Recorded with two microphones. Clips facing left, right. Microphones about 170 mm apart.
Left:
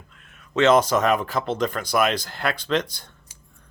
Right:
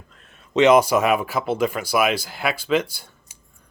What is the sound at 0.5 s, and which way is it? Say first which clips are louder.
Speech: right 3 dB; 15° right (ahead or behind).